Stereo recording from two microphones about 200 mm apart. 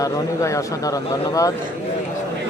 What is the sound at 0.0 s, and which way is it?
Speech, 15° left (ahead or behind).